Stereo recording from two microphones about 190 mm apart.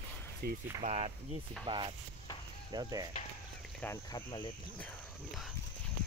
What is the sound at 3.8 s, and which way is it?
Speech, 20° left (ahead or behind).